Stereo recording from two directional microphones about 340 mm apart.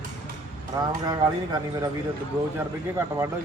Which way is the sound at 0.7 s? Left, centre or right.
Centre.